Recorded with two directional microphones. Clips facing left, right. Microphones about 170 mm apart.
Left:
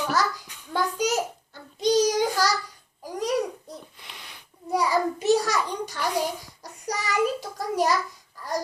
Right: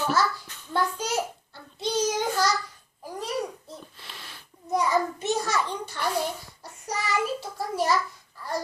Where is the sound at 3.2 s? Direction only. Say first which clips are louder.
Left 5 dB; 15° left (ahead or behind).